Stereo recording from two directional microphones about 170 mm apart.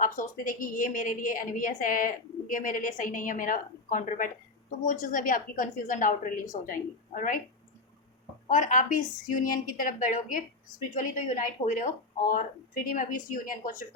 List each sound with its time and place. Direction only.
0.0 s a woman's voice: 50° left (ahead or behind)
8.4 s a woman's voice: 50° left (ahead or behind)